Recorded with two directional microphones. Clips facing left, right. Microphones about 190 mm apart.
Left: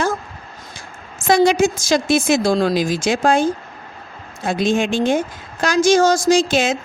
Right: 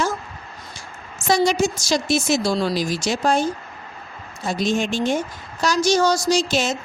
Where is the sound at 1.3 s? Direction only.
55° left (ahead or behind).